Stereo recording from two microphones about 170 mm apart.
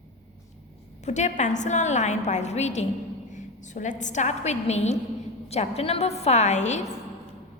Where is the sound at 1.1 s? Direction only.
45° left (ahead or behind).